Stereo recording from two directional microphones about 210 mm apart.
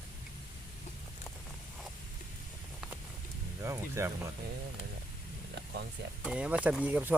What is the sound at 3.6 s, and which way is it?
Speech, 15° right (ahead or behind).